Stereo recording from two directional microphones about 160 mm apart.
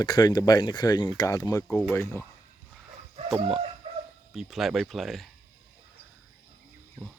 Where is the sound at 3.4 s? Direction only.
35° right (ahead or behind).